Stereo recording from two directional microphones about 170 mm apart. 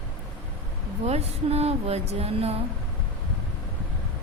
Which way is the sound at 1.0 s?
40° right (ahead or behind).